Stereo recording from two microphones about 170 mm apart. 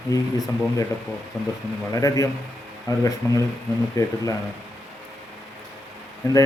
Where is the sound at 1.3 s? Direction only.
Centre (ahead or behind).